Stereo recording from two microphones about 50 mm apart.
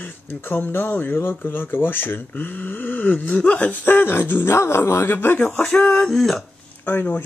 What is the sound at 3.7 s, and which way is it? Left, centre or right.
Speech, left.